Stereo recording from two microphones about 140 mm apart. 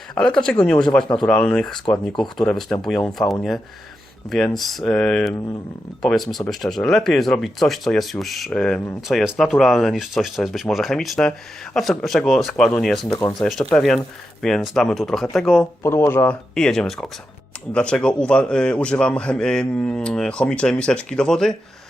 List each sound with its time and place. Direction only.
0.1 s a man's voice: 5° left (ahead or behind)
15.8 s a man's voice: 20° left (ahead or behind)
16.6 s a man's voice: 5° left (ahead or behind)